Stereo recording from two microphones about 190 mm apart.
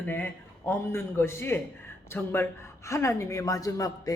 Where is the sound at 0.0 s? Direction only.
10° left (ahead or behind).